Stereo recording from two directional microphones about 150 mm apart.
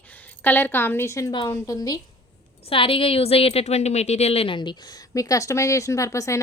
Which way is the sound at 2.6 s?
35° left (ahead or behind).